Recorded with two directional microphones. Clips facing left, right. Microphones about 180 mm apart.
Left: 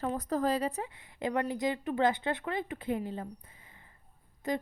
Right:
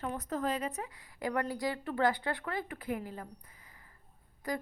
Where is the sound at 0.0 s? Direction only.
35° left (ahead or behind).